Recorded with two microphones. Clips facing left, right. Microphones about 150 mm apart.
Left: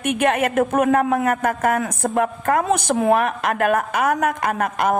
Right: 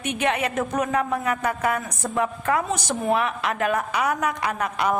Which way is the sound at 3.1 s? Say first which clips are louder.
Left 3 dB; 50° left (ahead or behind).